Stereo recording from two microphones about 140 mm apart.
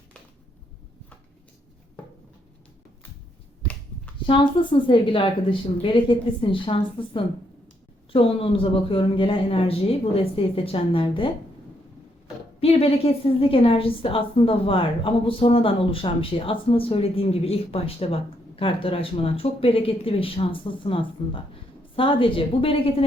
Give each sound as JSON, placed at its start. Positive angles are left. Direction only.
{"t": 3.6, "sound": "finger snapping", "side_deg": 10}
{"t": 4.3, "sound": "a woman's voice", "side_deg": 40}
{"t": 12.5, "sound": "a woman's voice", "side_deg": 45}